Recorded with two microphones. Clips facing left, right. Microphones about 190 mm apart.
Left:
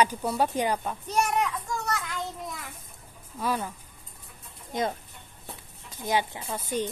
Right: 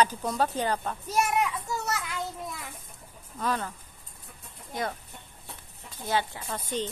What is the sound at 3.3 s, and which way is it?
Speech, 10° left (ahead or behind).